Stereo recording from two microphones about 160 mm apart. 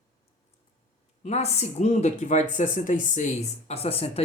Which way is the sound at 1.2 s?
45° left (ahead or behind).